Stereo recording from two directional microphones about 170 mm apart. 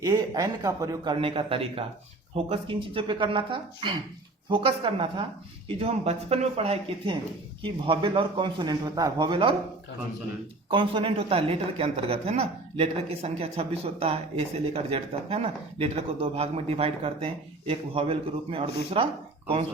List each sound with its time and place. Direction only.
0.0 s a man's voice: 20° right (ahead or behind)
10.7 s speech: 30° right (ahead or behind)